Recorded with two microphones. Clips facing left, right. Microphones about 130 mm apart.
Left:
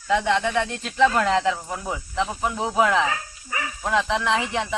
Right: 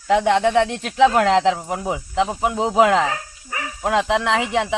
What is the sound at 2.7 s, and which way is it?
Speech, 75° right (ahead or behind).